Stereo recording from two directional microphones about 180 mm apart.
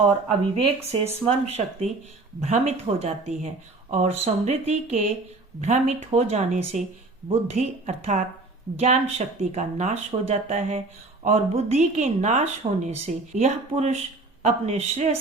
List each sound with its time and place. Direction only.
0.9 s speech: 35° right (ahead or behind)